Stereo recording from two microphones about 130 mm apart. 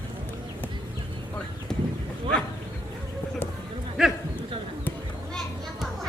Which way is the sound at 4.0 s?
5° right (ahead or behind).